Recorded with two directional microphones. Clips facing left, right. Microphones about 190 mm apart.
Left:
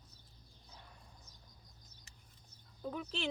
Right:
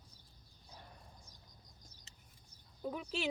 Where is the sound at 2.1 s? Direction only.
20° right (ahead or behind).